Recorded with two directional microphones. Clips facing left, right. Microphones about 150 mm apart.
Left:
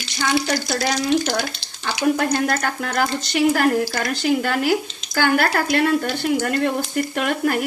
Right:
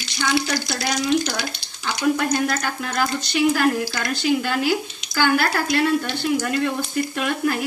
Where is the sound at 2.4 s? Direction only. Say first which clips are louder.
Left 2 dB; 55° left (ahead or behind).